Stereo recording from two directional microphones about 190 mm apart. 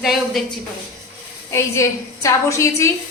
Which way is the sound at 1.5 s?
15° left (ahead or behind).